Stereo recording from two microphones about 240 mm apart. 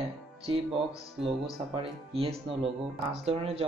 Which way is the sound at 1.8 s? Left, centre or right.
Right.